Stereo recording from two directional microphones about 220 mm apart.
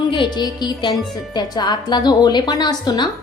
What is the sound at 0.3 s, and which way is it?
A woman's voice, 20° left (ahead or behind).